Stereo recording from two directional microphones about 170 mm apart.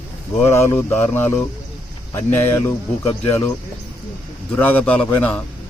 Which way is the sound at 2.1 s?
15° left (ahead or behind).